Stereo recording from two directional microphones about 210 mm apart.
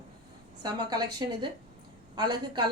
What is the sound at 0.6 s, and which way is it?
A woman's voice, 20° right (ahead or behind).